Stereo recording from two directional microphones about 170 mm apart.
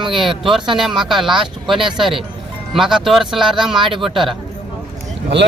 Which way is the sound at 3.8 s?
30° right (ahead or behind).